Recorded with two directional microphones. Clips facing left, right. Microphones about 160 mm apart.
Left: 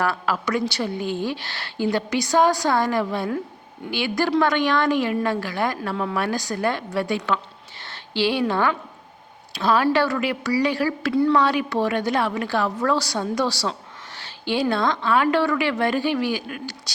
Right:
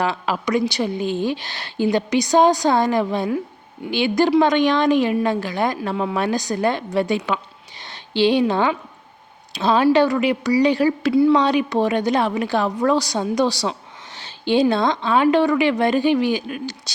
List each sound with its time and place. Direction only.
0.0 s a woman's voice: 20° right (ahead or behind)